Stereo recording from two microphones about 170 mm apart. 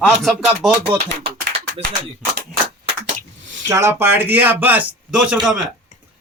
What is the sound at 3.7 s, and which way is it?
A man's voice, 15° right (ahead or behind).